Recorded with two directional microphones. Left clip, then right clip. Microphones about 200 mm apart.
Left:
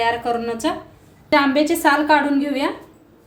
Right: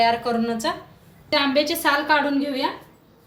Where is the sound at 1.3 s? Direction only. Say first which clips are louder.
Left 4 dB; 30° left (ahead or behind).